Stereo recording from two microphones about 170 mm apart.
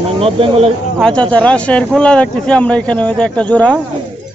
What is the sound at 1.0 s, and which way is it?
Speech, 5° left (ahead or behind).